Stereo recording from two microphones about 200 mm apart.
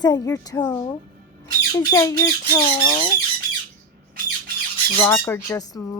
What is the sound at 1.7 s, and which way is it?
A woman's voice, 20° left (ahead or behind).